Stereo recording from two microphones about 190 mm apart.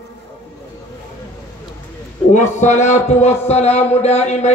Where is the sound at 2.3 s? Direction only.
40° left (ahead or behind).